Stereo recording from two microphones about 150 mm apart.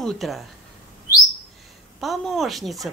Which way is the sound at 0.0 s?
Centre (ahead or behind).